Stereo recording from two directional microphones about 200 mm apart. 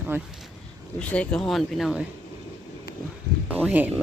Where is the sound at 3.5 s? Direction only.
5° right (ahead or behind).